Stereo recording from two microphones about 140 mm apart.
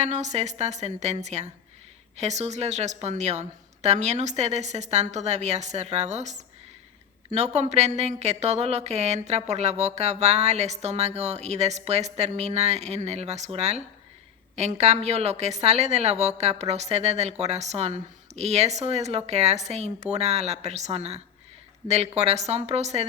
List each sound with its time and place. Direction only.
0.0 s speech: 55° right (ahead or behind)